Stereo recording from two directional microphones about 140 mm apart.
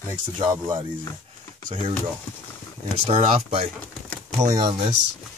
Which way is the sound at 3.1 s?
40° right (ahead or behind).